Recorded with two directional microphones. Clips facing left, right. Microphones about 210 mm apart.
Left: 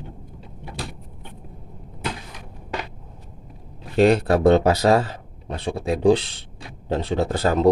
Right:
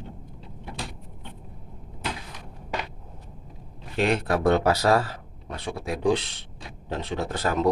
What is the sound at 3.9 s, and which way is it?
Speech, 35° left (ahead or behind).